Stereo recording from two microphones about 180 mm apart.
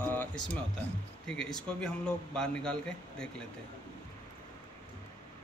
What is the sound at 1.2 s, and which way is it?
Speech, 5° left (ahead or behind).